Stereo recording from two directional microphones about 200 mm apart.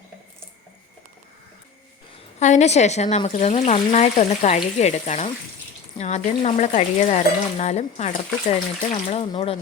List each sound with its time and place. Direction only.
2.4 s speech: 35° left (ahead or behind)